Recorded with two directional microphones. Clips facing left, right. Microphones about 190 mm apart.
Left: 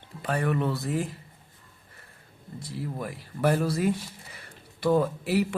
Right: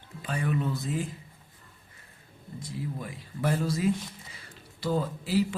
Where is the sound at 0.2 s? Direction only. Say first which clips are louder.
Left 3 dB; 60° left (ahead or behind).